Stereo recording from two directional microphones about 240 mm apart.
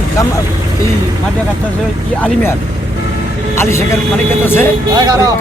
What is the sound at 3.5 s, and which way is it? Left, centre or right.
Speech, centre.